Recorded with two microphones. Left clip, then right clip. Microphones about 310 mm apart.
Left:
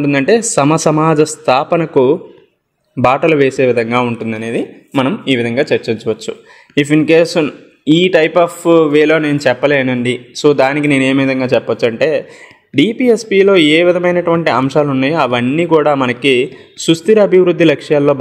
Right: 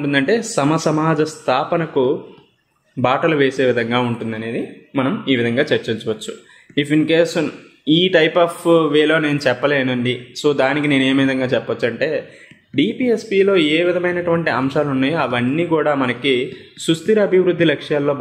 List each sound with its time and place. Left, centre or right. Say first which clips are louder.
0.0 s speech: left 6 dB; left